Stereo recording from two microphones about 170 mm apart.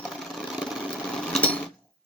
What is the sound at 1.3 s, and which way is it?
Mechanisms, 5° left (ahead or behind).